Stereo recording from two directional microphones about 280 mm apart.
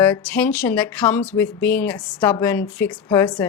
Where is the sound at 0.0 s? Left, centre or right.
Centre.